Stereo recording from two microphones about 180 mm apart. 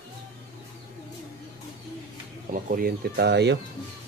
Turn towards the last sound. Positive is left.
turn(degrees=-70)  # may be behind; listen again after turning